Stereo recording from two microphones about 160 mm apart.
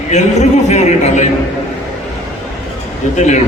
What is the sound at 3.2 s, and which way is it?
Speech, 45° left (ahead or behind).